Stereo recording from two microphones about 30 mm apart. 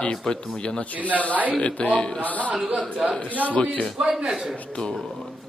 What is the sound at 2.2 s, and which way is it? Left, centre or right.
A man's voice, left.